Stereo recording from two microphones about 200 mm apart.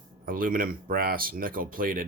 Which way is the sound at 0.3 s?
45° right (ahead or behind).